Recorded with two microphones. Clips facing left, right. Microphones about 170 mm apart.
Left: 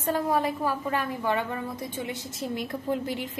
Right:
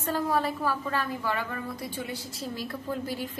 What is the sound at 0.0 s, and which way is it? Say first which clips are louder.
A woman's voice: left 2 dB; 15° left (ahead or behind).